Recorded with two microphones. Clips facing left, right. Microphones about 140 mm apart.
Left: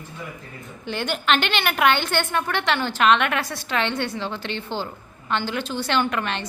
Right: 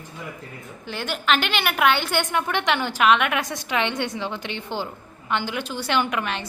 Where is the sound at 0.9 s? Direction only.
Centre (ahead or behind).